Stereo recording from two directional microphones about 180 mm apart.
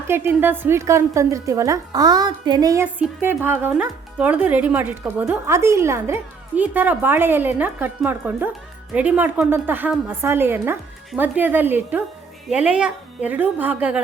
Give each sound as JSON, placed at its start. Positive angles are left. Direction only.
{"t": 0.1, "sound": "speech", "side_deg": -10}
{"t": 2.8, "sound": "speech", "side_deg": -10}